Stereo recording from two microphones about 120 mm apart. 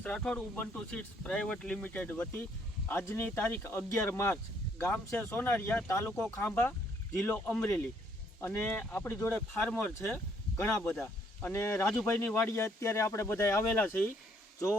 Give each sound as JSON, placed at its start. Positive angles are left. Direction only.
{"t": 0.0, "sound": "speech", "side_deg": 10}
{"t": 12.0, "sound": "speech", "side_deg": 20}